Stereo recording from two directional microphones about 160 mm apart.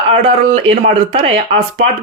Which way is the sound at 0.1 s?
40° right (ahead or behind).